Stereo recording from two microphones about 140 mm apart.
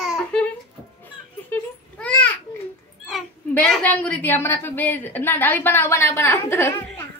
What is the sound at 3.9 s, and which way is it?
A woman's voice, 10° left (ahead or behind).